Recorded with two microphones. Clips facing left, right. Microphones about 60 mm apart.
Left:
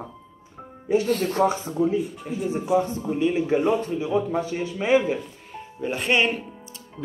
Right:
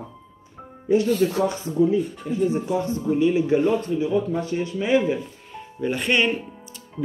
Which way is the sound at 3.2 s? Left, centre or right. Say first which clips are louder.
Right 2 dB; left.